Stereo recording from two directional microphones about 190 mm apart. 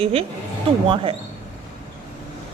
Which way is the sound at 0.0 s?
30° right (ahead or behind).